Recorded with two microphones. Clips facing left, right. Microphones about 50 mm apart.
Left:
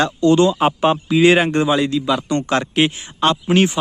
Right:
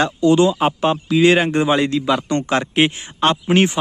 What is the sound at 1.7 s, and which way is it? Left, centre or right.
Speech, right.